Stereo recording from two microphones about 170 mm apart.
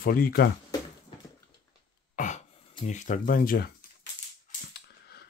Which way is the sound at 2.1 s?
45° left (ahead or behind).